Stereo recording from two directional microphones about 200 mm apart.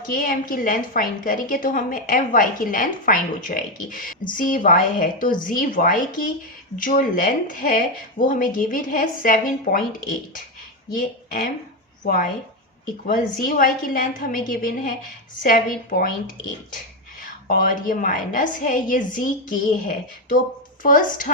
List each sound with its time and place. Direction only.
0.0 s a woman's voice: 45° left (ahead or behind)
17.5 s a woman's voice: 45° left (ahead or behind)